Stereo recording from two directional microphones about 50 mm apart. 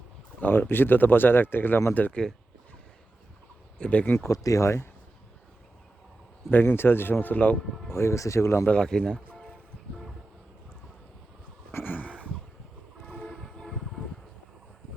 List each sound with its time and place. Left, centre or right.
0.3 s speech: left
3.8 s speech: left
4.3 s speech: left
6.5 s speech: left
7.9 s speech: left
8.8 s a man's voice: centre
11.7 s a sound: left
13.1 s train: left
13.4 s train: centre